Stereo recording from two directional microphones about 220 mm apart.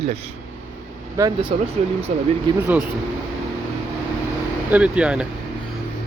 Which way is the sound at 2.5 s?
20° right (ahead or behind).